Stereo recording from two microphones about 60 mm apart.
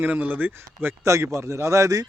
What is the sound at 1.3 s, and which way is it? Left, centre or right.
Speech, right.